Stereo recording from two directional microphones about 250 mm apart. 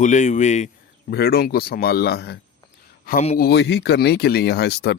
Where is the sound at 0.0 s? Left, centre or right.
Left.